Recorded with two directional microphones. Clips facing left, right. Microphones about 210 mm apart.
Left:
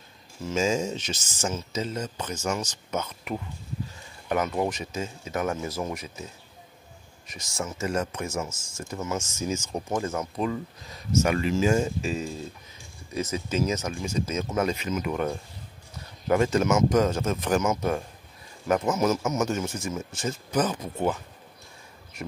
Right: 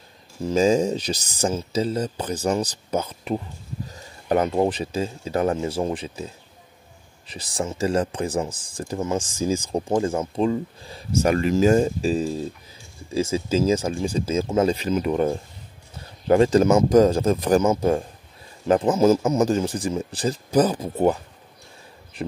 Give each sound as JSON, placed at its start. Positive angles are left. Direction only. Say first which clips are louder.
{"t": 0.5, "sound": "speech", "louder": "right 7 dB", "side_deg": -35}
{"t": 11.3, "sound": "speech", "louder": "right 9 dB", "side_deg": -40}